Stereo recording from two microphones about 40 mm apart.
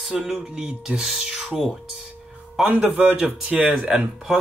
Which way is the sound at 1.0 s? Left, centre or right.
Centre.